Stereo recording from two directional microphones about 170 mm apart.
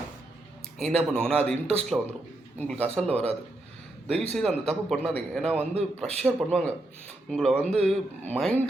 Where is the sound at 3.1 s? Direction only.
35° right (ahead or behind).